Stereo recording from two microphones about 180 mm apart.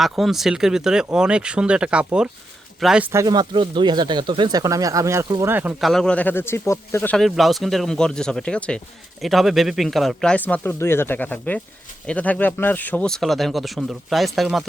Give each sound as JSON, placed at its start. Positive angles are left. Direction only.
{"t": 0.0, "sound": "speech", "side_deg": 0}
{"t": 3.1, "sound": "speech", "side_deg": -20}
{"t": 5.8, "sound": "speech", "side_deg": 0}